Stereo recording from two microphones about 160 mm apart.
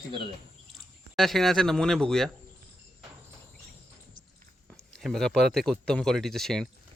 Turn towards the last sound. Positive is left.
turn(degrees=0)  # may be behind; listen again after turning